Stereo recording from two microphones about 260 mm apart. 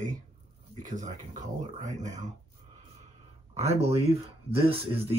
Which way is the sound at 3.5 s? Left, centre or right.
Right.